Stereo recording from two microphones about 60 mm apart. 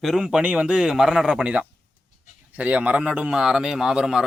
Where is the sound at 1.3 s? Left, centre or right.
Right.